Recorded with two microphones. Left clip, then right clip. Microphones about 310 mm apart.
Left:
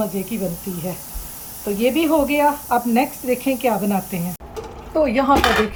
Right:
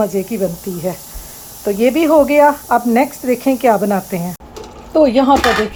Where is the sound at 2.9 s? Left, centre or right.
Centre.